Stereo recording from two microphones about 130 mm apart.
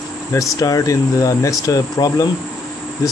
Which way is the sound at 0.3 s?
25° left (ahead or behind).